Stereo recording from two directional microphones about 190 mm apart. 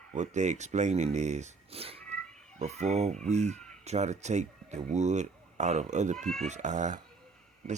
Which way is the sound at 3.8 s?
35° right (ahead or behind).